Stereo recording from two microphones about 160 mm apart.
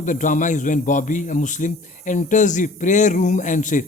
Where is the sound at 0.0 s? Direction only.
55° left (ahead or behind).